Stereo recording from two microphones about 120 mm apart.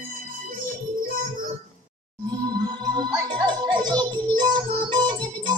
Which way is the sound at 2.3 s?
35° right (ahead or behind).